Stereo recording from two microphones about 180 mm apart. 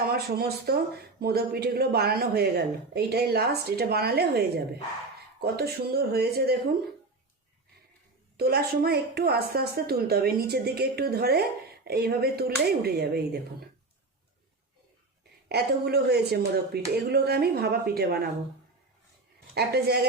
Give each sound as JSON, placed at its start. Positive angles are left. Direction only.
{"t": 0.1, "sound": "speech", "side_deg": -60}
{"t": 8.4, "sound": "speech", "side_deg": -60}
{"t": 15.4, "sound": "speech", "side_deg": -60}
{"t": 19.5, "sound": "speech", "side_deg": -60}